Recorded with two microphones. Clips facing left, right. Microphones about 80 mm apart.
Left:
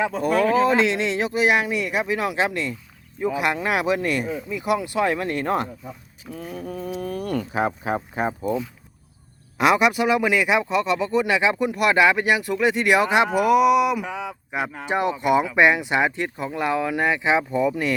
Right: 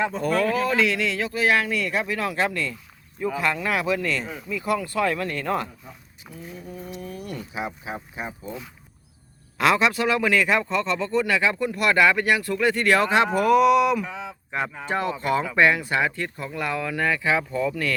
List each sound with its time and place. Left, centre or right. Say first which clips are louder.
0.0 s speech: left 2 dB; centre; by 5.6 s left
6.3 s speech: left 6 dB; left
9.6 s speech: left 2 dB; centre